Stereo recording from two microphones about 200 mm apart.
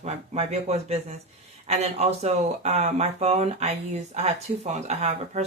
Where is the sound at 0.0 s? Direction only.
30° right (ahead or behind).